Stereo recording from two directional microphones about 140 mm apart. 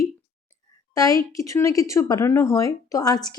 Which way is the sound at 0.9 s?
25° left (ahead or behind).